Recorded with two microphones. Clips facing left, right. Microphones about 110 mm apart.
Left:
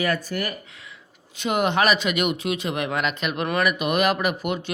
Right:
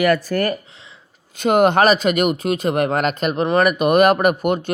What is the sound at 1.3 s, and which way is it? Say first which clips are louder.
Speech: right 8 dB; 45° right (ahead or behind).